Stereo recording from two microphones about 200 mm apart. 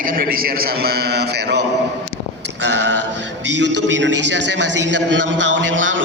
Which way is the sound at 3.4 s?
65° right (ahead or behind).